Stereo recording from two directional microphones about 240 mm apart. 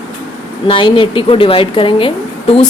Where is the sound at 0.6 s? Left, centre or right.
Left.